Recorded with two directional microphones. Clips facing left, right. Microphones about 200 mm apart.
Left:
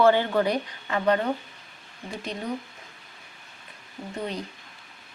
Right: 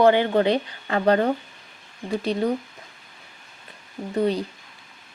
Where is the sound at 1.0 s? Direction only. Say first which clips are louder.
Right 4 dB; 40° right (ahead or behind).